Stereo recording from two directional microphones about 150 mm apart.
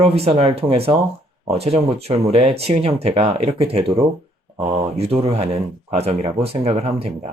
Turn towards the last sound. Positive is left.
turn(degrees=-40)  # may be behind; listen again after turning